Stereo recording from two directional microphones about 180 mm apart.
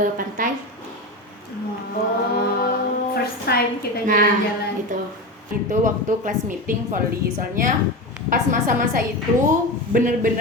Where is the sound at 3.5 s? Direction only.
60° left (ahead or behind).